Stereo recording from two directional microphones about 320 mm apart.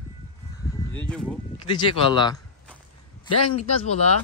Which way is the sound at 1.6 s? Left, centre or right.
Centre.